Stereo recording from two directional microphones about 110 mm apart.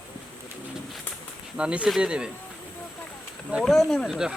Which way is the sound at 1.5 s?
10° right (ahead or behind).